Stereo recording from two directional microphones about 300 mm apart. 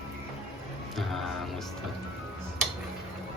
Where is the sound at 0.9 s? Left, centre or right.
Centre.